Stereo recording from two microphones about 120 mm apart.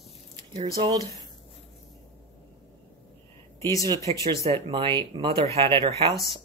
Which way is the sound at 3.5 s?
25° left (ahead or behind).